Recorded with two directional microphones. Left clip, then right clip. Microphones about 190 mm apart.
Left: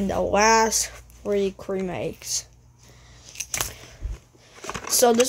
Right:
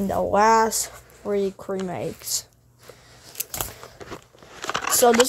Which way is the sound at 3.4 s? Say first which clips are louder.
Left 2 dB; 30° right (ahead or behind).